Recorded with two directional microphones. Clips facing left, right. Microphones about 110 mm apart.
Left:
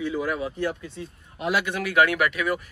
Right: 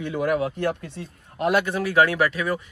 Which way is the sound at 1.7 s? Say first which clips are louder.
Right 2 dB; 30° right (ahead or behind).